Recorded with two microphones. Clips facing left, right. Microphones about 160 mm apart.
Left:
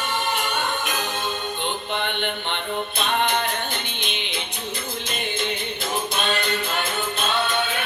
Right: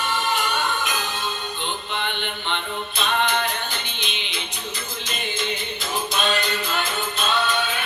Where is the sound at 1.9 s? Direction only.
55° left (ahead or behind).